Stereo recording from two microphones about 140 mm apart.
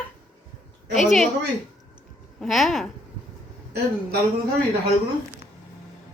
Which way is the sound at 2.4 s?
Centre (ahead or behind).